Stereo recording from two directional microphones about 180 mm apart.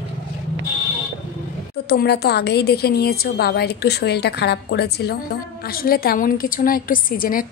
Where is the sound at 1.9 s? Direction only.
65° left (ahead or behind).